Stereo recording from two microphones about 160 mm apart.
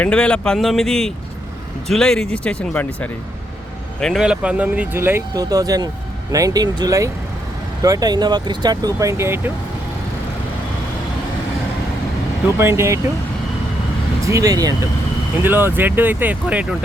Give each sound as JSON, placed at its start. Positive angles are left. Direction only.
{"t": 0.0, "sound": "speech", "side_deg": 5}
{"t": 4.0, "sound": "speech", "side_deg": 0}
{"t": 12.5, "sound": "speech", "side_deg": -15}
{"t": 14.3, "sound": "speech", "side_deg": -20}
{"t": 15.4, "sound": "speech", "side_deg": -15}